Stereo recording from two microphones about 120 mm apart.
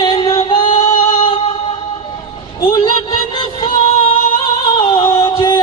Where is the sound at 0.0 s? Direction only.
40° left (ahead or behind).